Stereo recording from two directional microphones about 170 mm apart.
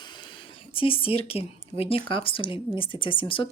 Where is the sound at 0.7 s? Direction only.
30° left (ahead or behind).